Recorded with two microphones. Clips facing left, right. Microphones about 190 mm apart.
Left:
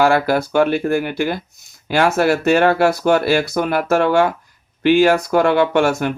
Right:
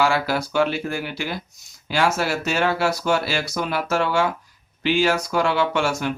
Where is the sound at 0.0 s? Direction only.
55° left (ahead or behind).